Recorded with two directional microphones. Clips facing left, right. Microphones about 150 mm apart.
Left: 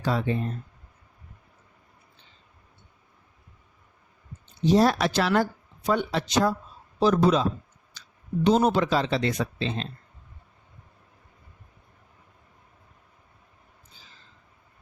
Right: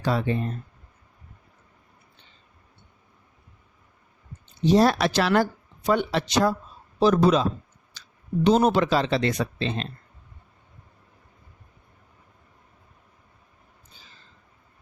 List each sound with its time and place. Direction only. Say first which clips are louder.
0.0 s speech: right 1 dB; 70° right (ahead or behind)
4.6 s speech: right 1 dB; 75° right (ahead or behind)
8.4 s speech: right 2 dB; 70° right (ahead or behind)